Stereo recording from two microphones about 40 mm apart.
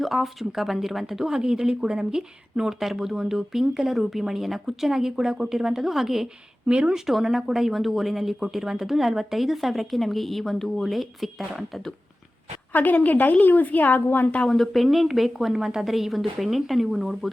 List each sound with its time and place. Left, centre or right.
0.0 s speech: centre
6.7 s speech: right
7.1 s speech: centre
12.7 s a woman's voice: left
14.4 s speech: centre